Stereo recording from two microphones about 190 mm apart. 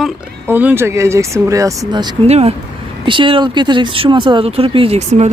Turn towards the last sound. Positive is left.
turn(degrees=-35)  # may be behind; listen again after turning